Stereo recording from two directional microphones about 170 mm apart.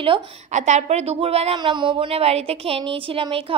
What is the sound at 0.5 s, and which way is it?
A woman's voice, 45° right (ahead or behind).